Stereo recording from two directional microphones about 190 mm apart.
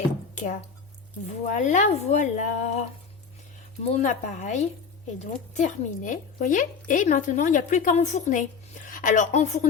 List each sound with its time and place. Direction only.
0.3 s a woman's voice: 40° left (ahead or behind)
3.9 s a woman's voice: 40° left (ahead or behind)